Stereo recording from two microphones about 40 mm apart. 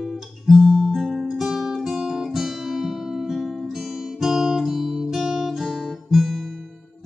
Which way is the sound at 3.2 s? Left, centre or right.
Centre.